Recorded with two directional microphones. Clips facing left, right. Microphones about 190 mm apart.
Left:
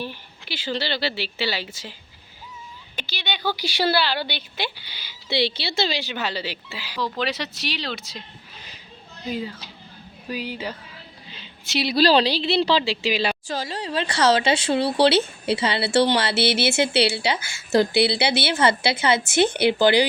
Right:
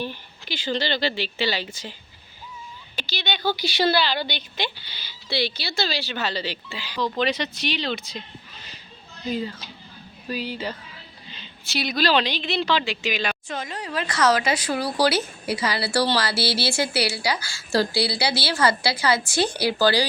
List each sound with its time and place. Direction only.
0.0 s speech: 10° left (ahead or behind)
3.1 s speech: 10° left (ahead or behind)
5.4 s speech: 25° left (ahead or behind); by 8.2 s centre (ahead or behind)
9.3 s speech: 10° left (ahead or behind)
11.6 s a woman's voice: 25° left (ahead or behind)